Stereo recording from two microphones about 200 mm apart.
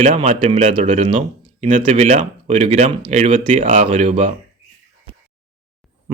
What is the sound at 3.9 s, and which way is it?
Speech, 30° right (ahead or behind).